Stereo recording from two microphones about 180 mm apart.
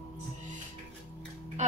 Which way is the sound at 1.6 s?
40° right (ahead or behind).